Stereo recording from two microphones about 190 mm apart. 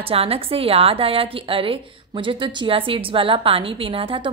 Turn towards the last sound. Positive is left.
turn(degrees=-30)  # may be behind; listen again after turning